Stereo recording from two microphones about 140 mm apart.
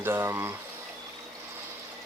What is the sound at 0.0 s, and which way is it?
Speech, 20° right (ahead or behind).